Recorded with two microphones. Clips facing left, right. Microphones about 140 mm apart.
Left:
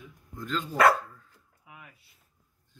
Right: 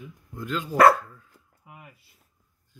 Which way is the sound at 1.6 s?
50° right (ahead or behind).